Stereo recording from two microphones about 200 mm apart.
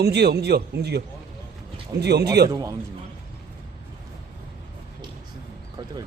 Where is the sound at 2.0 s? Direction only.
55° right (ahead or behind).